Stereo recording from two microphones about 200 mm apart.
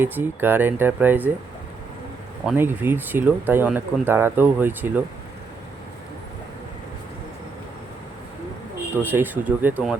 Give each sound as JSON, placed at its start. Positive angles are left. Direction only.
{"t": 0.0, "sound": "speech", "side_deg": -10}
{"t": 2.5, "sound": "speech", "side_deg": -10}
{"t": 9.0, "sound": "speech", "side_deg": -10}